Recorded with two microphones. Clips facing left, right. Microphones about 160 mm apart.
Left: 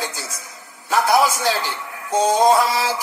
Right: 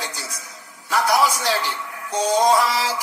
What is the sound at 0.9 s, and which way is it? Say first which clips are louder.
Music: left 2 dB; 25° left (ahead or behind).